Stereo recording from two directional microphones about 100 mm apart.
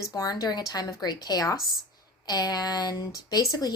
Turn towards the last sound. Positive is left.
turn(degrees=40)  # may be behind; listen again after turning